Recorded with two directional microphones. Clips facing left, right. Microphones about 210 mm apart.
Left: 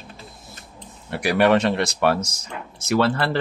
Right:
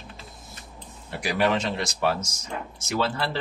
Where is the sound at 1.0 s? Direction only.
65° left (ahead or behind).